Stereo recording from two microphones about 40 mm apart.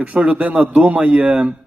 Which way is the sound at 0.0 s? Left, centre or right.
Right.